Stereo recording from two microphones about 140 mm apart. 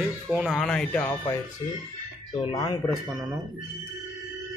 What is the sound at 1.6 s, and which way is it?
Speech, 30° left (ahead or behind).